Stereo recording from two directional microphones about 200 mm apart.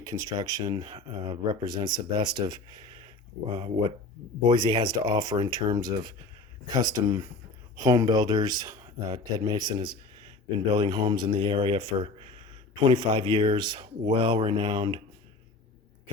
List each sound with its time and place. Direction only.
0.0 s speech: 20° right (ahead or behind)
4.4 s speech: 20° right (ahead or behind)
9.7 s a sound: 25° right (ahead or behind)
10.7 s speech: 25° right (ahead or behind)